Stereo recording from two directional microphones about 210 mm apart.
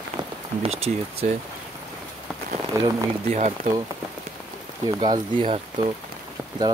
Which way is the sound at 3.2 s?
35° right (ahead or behind).